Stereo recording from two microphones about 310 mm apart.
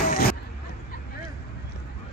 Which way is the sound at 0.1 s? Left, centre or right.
Left.